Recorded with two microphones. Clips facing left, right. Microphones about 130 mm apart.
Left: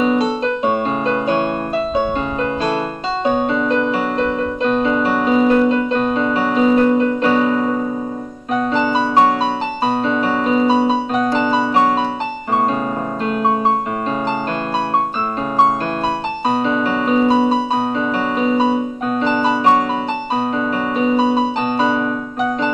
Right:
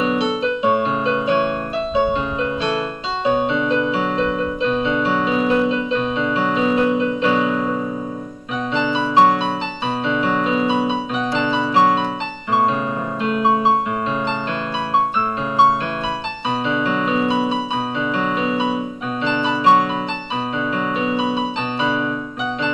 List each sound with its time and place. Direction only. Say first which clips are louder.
0.0 s music: left 3 dB; 45° left (ahead or behind)
3.4 s music: left 2 dB; 50° left (ahead or behind)
13.2 s music: even; 40° left (ahead or behind)
16.4 s music: left 3 dB; 45° left (ahead or behind)
19.2 s keyboard: left 2 dB; 45° left (ahead or behind)
21.0 s music: left 8 dB; 40° left (ahead or behind)